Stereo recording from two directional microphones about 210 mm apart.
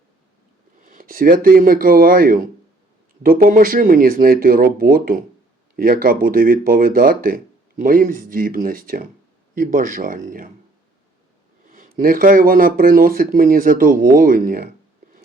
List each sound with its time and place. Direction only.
0.8 s speech: 40° right (ahead or behind)
11.7 s speech: 40° right (ahead or behind)